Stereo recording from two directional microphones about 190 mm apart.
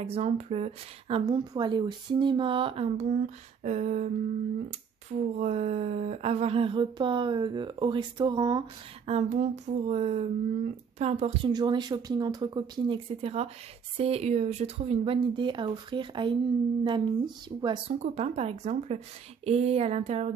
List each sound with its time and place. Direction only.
0.0 s speech: 35° right (ahead or behind)
9.0 s speech: 35° right (ahead or behind)